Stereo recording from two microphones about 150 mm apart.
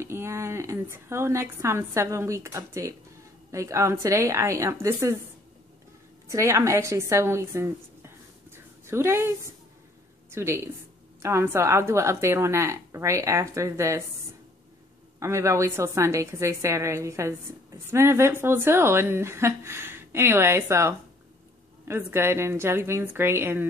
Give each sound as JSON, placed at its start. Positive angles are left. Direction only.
{"t": 0.0, "sound": "a woman's voice", "side_deg": -15}
{"t": 6.3, "sound": "a woman's voice", "side_deg": -20}
{"t": 10.3, "sound": "a woman's voice", "side_deg": -15}
{"t": 15.1, "sound": "a woman's voice", "side_deg": -20}